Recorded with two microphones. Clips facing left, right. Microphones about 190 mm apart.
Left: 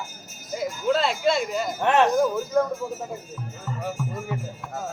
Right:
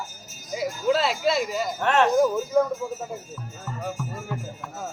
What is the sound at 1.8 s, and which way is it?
Speech, 15° left (ahead or behind).